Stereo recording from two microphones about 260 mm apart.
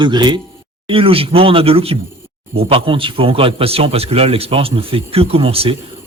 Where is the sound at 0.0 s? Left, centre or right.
Centre.